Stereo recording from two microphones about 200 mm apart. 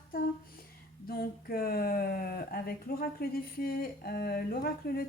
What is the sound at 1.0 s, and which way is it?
Speech, 50° left (ahead or behind).